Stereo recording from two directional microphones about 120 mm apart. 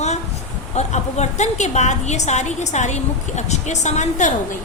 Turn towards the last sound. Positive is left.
turn(degrees=85)